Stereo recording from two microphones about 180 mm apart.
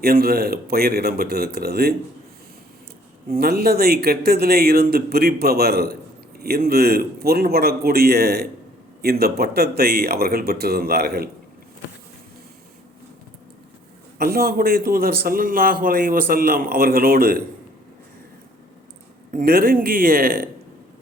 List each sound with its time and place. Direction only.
0.0 s speech: 60° right (ahead or behind)
3.2 s speech: 60° right (ahead or behind)
14.2 s a man's voice: 55° right (ahead or behind)
19.3 s a man's voice: 55° right (ahead or behind)